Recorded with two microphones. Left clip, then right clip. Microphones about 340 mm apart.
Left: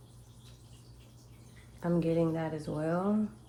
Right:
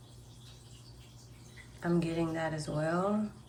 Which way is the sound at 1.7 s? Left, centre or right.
Centre.